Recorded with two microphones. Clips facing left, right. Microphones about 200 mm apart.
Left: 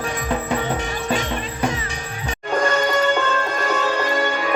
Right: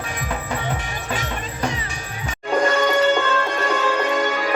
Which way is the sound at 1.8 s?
35° left (ahead or behind).